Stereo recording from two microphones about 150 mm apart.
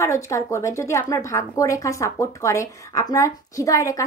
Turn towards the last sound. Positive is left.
turn(degrees=25)  # may be behind; listen again after turning